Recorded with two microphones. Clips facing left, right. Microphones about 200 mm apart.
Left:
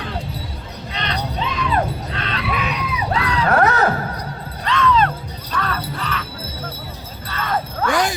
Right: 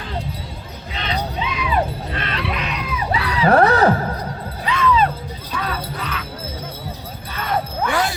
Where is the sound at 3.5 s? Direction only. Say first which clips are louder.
Right 4 dB; 35° right (ahead or behind).